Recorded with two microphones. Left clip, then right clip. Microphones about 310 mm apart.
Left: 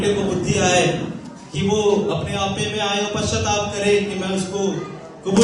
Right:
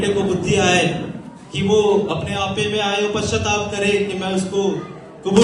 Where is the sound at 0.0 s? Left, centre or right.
Right.